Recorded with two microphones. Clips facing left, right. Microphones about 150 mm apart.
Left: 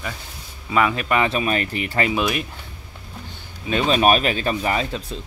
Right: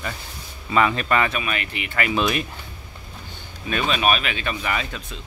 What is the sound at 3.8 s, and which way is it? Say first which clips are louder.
Speech: left 5 dB; 40° left (ahead or behind).